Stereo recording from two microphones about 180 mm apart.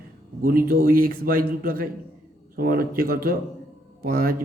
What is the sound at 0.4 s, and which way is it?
Speech, 55° right (ahead or behind).